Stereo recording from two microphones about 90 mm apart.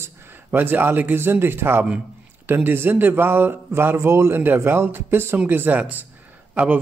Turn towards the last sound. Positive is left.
turn(degrees=-15)  # may be behind; listen again after turning